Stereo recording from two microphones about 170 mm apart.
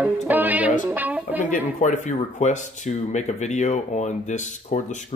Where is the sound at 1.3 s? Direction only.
45° left (ahead or behind).